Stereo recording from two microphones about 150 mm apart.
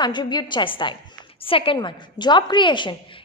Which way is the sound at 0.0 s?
30° left (ahead or behind).